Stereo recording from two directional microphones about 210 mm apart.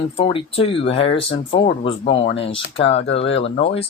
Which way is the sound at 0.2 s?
25° left (ahead or behind).